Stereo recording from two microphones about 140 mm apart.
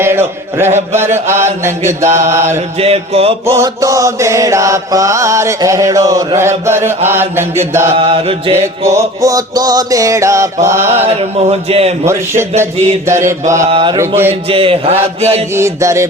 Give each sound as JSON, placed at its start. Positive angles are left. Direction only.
{"t": 0.0, "sound": "chant", "side_deg": -15}
{"t": 1.0, "sound": "mantra", "side_deg": -20}
{"t": 2.7, "sound": "mantra", "side_deg": -45}
{"t": 3.4, "sound": "mantra", "side_deg": -20}
{"t": 7.9, "sound": "mantra", "side_deg": -40}
{"t": 8.8, "sound": "mantra", "side_deg": -20}
{"t": 11.2, "sound": "mantra", "side_deg": -45}
{"t": 12.0, "sound": "mantra", "side_deg": -20}
{"t": 13.7, "sound": "mantra", "side_deg": -40}
{"t": 15.5, "sound": "mantra", "side_deg": -20}